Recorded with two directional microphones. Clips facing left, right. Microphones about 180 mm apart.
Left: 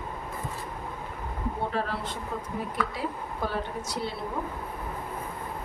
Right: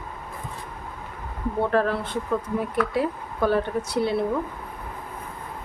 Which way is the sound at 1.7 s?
55° right (ahead or behind).